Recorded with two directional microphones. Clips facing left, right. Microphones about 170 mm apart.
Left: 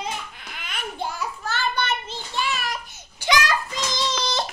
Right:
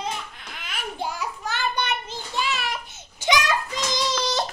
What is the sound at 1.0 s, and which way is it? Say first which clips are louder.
Child singing: even; 15° right (ahead or behind).